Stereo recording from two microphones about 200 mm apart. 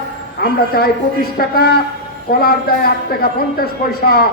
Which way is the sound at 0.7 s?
50° left (ahead or behind).